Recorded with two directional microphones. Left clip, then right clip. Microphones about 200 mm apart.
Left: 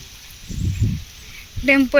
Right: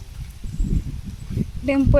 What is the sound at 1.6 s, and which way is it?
Speech, 5° right (ahead or behind).